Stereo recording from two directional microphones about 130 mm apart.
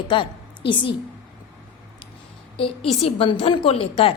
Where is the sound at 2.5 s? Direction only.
45° left (ahead or behind).